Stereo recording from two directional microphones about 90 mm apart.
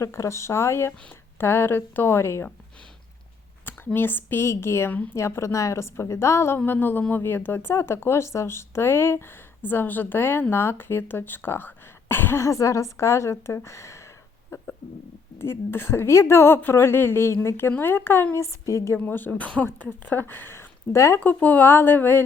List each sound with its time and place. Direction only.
0.0 s a woman's voice: 35° left (ahead or behind)
3.9 s a woman's voice: 25° left (ahead or behind)
5.1 s a woman's voice: 30° left (ahead or behind)
14.5 s a sound: 30° left (ahead or behind)
15.4 s a woman's voice: 25° left (ahead or behind)
18.4 s speech: 35° left (ahead or behind)
18.9 s a woman's voice: 20° left (ahead or behind)
21.2 s a woman's voice: 20° left (ahead or behind)